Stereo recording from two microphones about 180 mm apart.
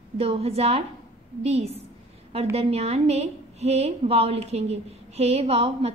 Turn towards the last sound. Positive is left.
turn(degrees=-35)  # may be behind; listen again after turning